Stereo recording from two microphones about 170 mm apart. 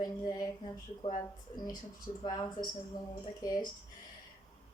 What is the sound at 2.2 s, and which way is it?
A woman's voice, 25° left (ahead or behind).